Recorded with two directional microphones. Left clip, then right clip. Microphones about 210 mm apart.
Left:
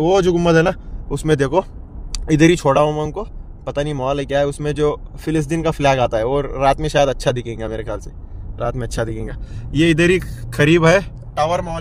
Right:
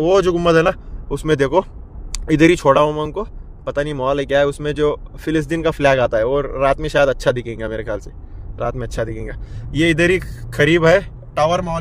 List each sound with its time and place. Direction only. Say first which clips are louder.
0.0 s speech: right 1 dB; centre (ahead or behind)
11.4 s speech: right 2 dB; 20° right (ahead or behind)